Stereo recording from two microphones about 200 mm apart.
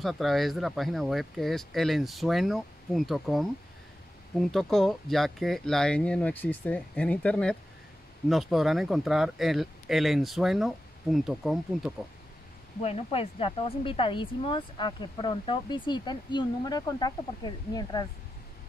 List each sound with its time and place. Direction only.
0.0 s speech: centre (ahead or behind)
12.8 s speech: 30° left (ahead or behind)